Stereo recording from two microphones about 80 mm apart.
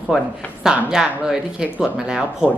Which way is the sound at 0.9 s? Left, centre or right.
Centre.